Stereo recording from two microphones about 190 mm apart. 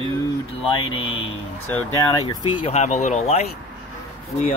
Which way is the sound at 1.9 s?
20° left (ahead or behind).